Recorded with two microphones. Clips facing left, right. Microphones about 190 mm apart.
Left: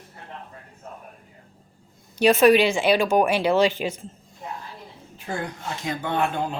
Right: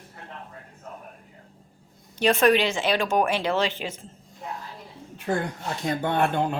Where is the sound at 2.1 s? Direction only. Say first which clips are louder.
Left 4 dB; 10° left (ahead or behind).